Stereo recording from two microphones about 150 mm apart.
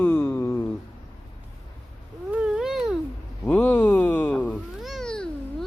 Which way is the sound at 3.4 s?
10° left (ahead or behind).